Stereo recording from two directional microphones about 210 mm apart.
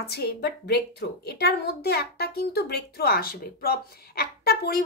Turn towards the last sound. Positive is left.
turn(degrees=45)  # may be behind; listen again after turning